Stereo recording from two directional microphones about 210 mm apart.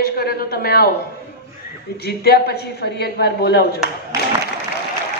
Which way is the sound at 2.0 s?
50° left (ahead or behind).